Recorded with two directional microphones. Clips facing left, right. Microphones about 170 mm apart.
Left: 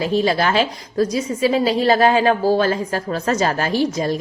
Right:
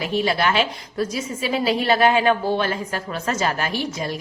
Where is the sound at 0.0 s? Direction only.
35° left (ahead or behind).